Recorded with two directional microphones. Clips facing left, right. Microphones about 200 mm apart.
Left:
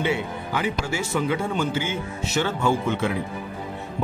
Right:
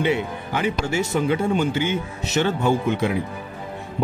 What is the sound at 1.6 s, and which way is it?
Speech, 20° right (ahead or behind).